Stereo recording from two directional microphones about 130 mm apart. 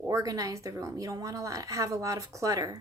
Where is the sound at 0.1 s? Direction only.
25° right (ahead or behind).